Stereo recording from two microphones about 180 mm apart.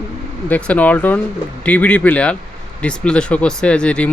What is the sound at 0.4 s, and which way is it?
Speech, 10° left (ahead or behind).